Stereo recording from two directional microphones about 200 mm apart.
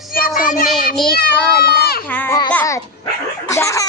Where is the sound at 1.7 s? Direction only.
50° left (ahead or behind).